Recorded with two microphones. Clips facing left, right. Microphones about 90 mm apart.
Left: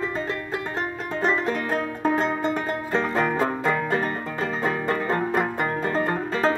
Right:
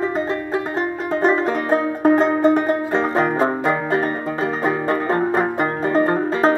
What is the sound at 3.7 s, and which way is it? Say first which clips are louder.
Banjo: right 4 dB; 35° right (ahead or behind).